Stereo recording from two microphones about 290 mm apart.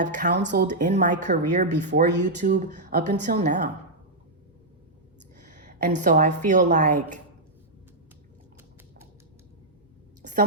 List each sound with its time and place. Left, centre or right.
0.0 s a woman's voice: right
5.5 s a woman's voice: right